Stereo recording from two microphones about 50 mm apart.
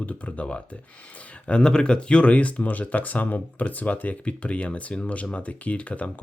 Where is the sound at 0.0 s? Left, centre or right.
Left.